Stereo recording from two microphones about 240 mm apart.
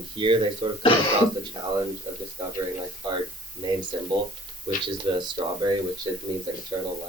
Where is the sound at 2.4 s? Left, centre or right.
Centre.